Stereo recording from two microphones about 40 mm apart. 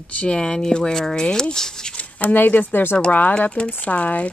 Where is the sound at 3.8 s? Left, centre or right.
Left.